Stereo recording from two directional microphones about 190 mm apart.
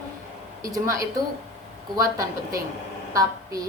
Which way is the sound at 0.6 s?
20° right (ahead or behind).